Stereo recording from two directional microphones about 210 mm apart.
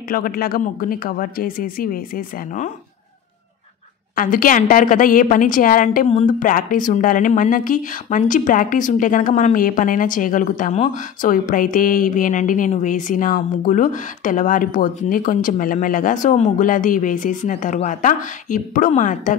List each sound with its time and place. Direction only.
0.1 s a man's voice: 45° left (ahead or behind)
4.1 s a woman's voice: 40° left (ahead or behind)